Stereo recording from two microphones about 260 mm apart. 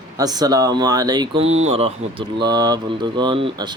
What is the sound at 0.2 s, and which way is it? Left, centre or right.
Speech, centre.